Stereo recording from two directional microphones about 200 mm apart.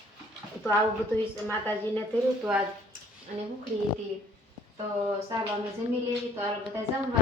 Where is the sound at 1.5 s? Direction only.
10° left (ahead or behind).